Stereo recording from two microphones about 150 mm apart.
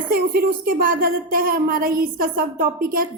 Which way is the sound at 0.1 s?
85° right.